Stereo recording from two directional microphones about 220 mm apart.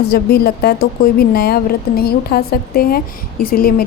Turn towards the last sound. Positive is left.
turn(degrees=40)  # may be behind; listen again after turning